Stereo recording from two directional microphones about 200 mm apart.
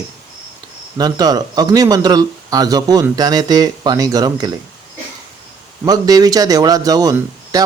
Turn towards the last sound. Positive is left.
turn(degrees=-20)  # may be behind; listen again after turning